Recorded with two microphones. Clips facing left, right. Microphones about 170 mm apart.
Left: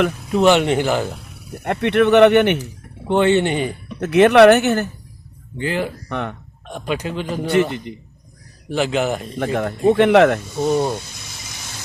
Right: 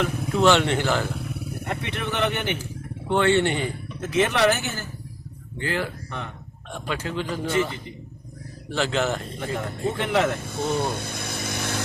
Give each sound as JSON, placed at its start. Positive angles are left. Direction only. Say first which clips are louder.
{"t": 0.3, "sound": "a man's voice", "louder": "left 5 dB", "side_deg": 15}
{"t": 1.6, "sound": "speech", "louder": "left 15 dB", "side_deg": 60}
{"t": 3.1, "sound": "speech", "louder": "left 4 dB", "side_deg": 20}
{"t": 4.0, "sound": "speech", "louder": "left 11 dB", "side_deg": 65}
{"t": 5.5, "sound": "a man's voice", "louder": "left 5 dB", "side_deg": 20}
{"t": 6.1, "sound": "speech", "louder": "left 9 dB", "side_deg": 65}
{"t": 6.7, "sound": "a man's voice", "louder": "left 6 dB", "side_deg": 15}
{"t": 7.4, "sound": "a man's voice", "louder": "left 9 dB", "side_deg": 65}
{"t": 8.7, "sound": "a man's voice", "louder": "left 5 dB", "side_deg": 15}
{"t": 9.4, "sound": "speech", "louder": "left 12 dB", "side_deg": 65}
{"t": 10.4, "sound": "speech", "louder": "left 6 dB", "side_deg": -55}
{"t": 10.8, "sound": "a sound", "louder": "left 6 dB", "side_deg": -55}